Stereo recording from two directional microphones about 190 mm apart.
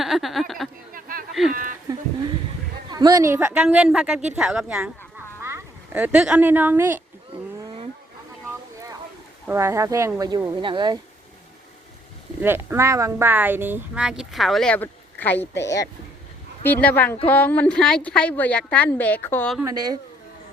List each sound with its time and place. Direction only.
0.0 s a sound: centre (ahead or behind)
0.9 s a sound: 50° right (ahead or behind)
2.9 s a woman's voice: 20° right (ahead or behind); by 4.9 s 5° right (ahead or behind)
5.4 s speech: 15° right (ahead or behind)
9.5 s a woman's voice: 15° right (ahead or behind)
12.4 s a woman's voice: 10° right (ahead or behind); by 19.5 s 10° left (ahead or behind)
19.6 s speech: 20° right (ahead or behind)